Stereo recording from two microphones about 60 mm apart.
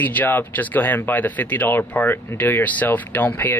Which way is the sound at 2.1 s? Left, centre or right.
Left.